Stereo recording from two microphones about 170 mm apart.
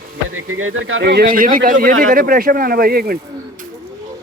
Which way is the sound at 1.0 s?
65° right (ahead or behind).